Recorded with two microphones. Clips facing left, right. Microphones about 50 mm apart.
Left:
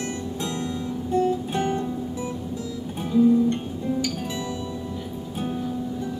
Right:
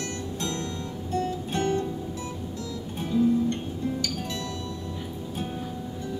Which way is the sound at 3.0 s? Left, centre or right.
Centre.